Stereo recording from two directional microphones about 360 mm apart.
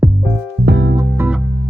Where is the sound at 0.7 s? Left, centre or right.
Right.